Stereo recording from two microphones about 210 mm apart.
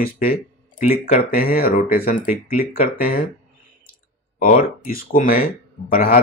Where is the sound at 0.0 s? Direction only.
45° left (ahead or behind).